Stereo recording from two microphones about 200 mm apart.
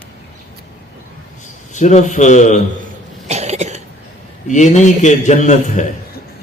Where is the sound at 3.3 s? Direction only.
35° right (ahead or behind).